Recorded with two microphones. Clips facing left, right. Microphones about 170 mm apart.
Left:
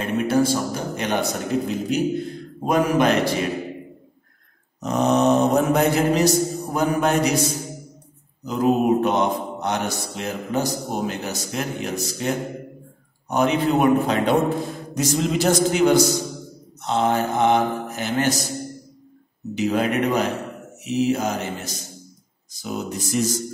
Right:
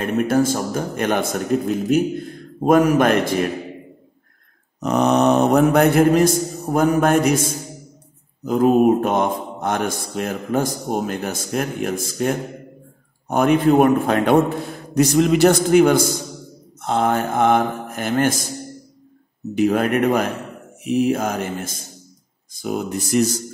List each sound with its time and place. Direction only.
0.0 s mantra: 50° right (ahead or behind)
2.6 s mantra: 50° right (ahead or behind)
4.7 s a man's voice: 65° right (ahead or behind)
8.5 s mantra: 50° right (ahead or behind)
15.0 s a man's voice: 65° right (ahead or behind)
16.8 s mantra: 50° right (ahead or behind)
19.5 s mantra: 50° right (ahead or behind)